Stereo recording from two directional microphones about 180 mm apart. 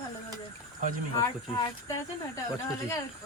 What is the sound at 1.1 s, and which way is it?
Speech, 20° left (ahead or behind).